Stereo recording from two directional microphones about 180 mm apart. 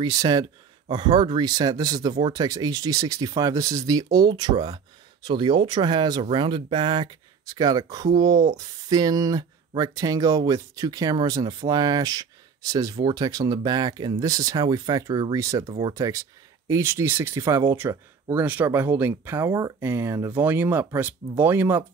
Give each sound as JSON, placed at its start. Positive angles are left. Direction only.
{"t": 0.0, "sound": "speech", "side_deg": -20}